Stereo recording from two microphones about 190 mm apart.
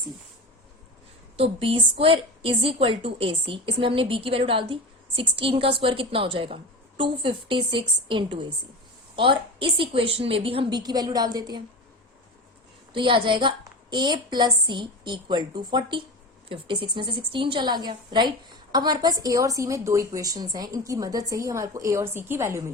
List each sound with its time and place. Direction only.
1.4 s a woman's voice: 30° right (ahead or behind)
12.9 s a woman's voice: 25° right (ahead or behind)